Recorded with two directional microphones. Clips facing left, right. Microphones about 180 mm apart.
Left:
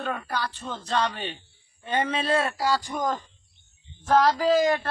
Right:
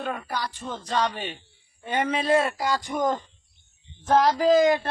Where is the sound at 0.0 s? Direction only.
10° right (ahead or behind).